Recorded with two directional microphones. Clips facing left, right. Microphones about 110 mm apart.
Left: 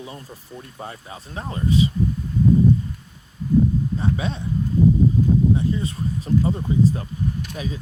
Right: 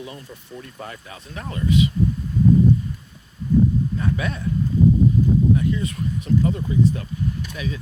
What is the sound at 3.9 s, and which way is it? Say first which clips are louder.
Speech: left 1 dB; 25° left (ahead or behind).